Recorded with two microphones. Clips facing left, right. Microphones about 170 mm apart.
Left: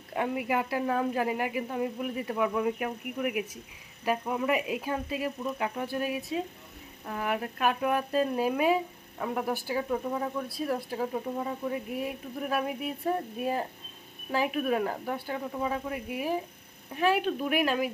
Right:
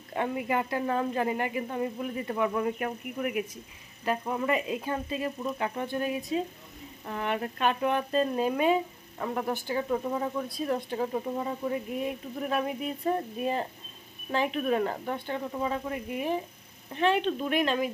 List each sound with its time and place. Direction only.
0.1 s speech: 5° left (ahead or behind)